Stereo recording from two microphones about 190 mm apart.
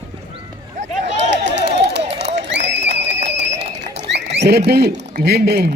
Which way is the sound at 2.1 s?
65° right (ahead or behind).